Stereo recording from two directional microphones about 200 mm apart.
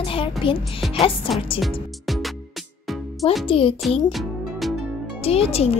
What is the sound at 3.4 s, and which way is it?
Speech, 25° left (ahead or behind).